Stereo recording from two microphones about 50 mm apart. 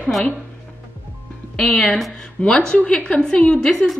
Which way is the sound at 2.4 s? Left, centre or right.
Left.